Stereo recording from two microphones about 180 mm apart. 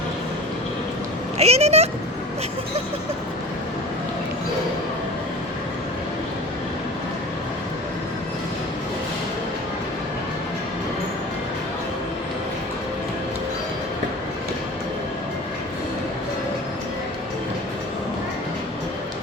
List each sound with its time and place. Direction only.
1.4 s speech: 35° right (ahead or behind)